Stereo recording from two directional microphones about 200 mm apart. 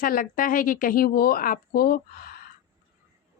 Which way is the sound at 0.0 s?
45° left (ahead or behind).